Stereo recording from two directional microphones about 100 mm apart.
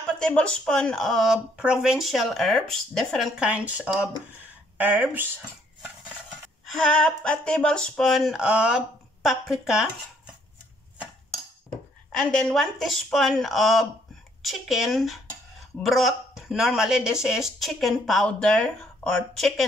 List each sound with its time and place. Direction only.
0.2 s speech: 10° left (ahead or behind)
3.3 s speech: 10° right (ahead or behind)
6.6 s speech: 5° left (ahead or behind)
12.1 s speech: 5° left (ahead or behind)